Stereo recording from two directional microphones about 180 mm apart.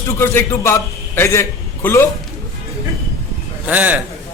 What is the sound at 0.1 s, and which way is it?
A man's voice, 15° left (ahead or behind).